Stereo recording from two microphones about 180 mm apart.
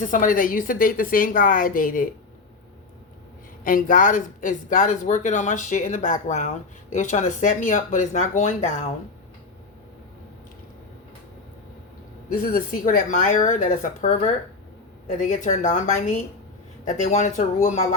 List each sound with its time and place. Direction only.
0.0 s speech: 45° left (ahead or behind)
3.6 s speech: 50° left (ahead or behind)
12.3 s speech: 50° left (ahead or behind)